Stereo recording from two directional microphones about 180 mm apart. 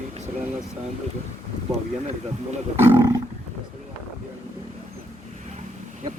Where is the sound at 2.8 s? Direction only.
15° right (ahead or behind).